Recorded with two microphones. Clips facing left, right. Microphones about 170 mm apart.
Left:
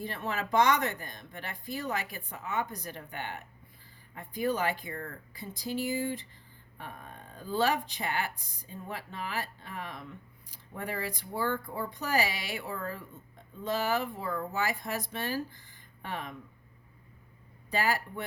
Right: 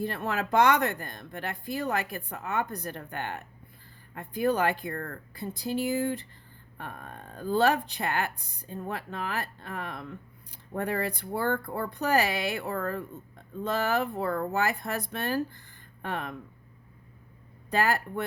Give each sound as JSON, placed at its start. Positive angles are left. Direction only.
{"t": 0.1, "sound": "speech", "side_deg": -60}
{"t": 17.7, "sound": "speech", "side_deg": -60}